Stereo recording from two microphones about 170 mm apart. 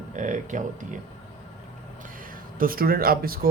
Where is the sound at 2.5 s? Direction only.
55° right (ahead or behind).